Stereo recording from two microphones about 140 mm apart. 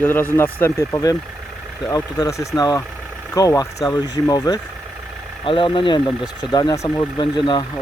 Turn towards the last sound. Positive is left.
turn(degrees=35)  # may be behind; listen again after turning